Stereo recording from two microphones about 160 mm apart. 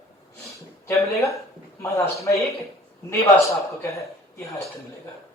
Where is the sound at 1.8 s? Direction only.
20° left (ahead or behind).